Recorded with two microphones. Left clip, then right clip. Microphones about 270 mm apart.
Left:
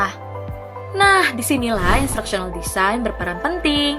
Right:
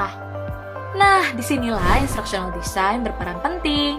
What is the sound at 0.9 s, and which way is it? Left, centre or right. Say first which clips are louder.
A woman's voice: left 1 dB; centre.